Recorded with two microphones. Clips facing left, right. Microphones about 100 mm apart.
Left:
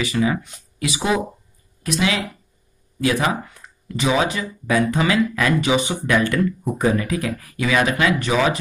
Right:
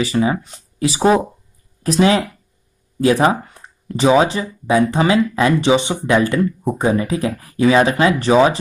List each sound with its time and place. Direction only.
0.0 s speech: 30° right (ahead or behind)